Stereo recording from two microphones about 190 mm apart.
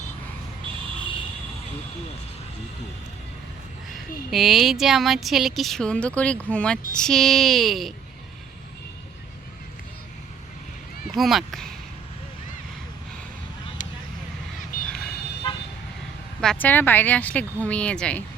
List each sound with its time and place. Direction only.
3.8 s speech: centre (ahead or behind)
11.1 s speech: centre (ahead or behind)
14.7 s a sound: 45° left (ahead or behind)
16.4 s speech: 5° left (ahead or behind)